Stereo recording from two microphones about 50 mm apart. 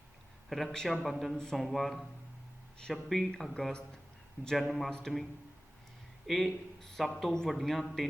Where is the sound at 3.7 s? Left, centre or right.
Centre.